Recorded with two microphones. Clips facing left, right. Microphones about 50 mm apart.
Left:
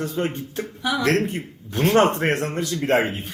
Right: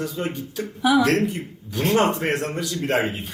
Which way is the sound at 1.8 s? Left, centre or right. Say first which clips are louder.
Left 2 dB; left.